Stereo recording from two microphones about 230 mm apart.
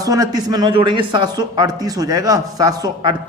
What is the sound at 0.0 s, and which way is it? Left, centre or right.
A man's voice, centre.